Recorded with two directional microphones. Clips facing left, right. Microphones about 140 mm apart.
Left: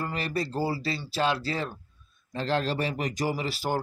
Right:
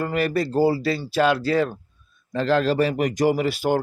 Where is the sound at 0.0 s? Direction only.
55° right (ahead or behind).